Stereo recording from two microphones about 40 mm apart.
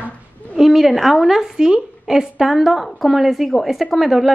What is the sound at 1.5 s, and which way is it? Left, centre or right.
A woman's voice, centre.